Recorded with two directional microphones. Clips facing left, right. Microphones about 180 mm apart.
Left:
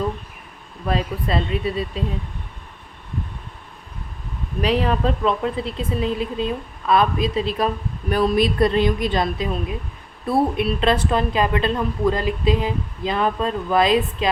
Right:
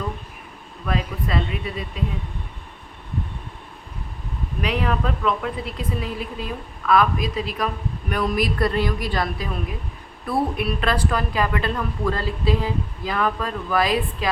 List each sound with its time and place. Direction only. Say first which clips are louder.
0.9 s speech: left 3 dB; 30° left (ahead or behind)
4.6 s a woman's voice: left 4 dB; 30° left (ahead or behind)